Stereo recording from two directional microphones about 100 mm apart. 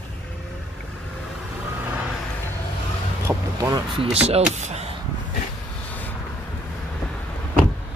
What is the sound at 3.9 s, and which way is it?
Speech, 85° right.